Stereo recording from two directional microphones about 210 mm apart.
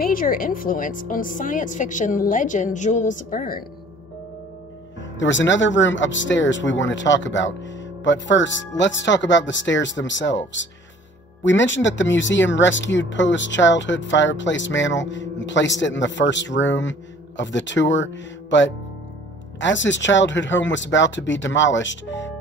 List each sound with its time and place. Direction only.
0.0 s a woman's voice: 40° left (ahead or behind)
5.1 s speech: 60° left (ahead or behind)